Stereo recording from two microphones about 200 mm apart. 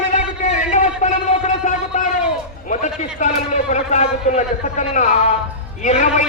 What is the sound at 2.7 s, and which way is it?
A man's voice, 40° left (ahead or behind).